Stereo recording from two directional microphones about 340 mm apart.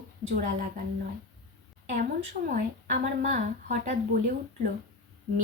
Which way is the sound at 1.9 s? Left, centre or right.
Right.